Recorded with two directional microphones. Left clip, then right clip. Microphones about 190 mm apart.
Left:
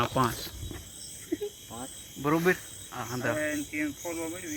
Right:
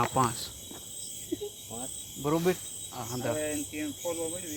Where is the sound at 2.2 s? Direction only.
10° left (ahead or behind).